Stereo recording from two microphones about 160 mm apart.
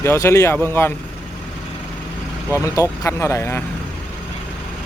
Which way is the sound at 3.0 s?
20° left (ahead or behind).